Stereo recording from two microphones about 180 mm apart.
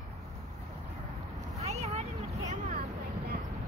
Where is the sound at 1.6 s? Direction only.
35° right (ahead or behind).